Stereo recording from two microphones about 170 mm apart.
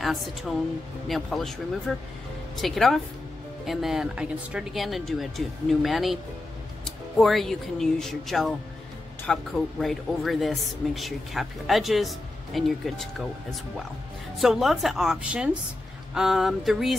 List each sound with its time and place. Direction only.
0.0 s speech: centre (ahead or behind)